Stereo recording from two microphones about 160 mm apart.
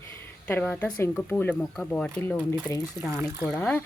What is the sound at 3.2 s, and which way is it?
Speech, 15° right (ahead or behind).